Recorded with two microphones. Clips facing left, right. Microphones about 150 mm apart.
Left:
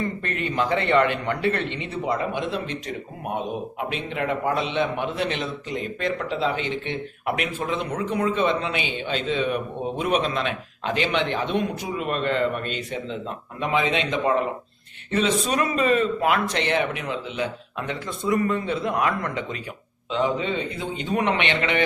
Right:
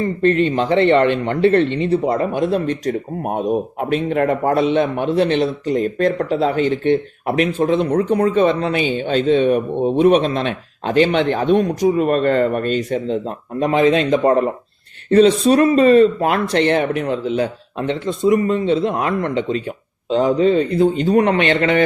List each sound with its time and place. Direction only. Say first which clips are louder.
0.0 s speech: right 12 dB; 30° right (ahead or behind)
20.1 s speech: right 9 dB; 40° right (ahead or behind)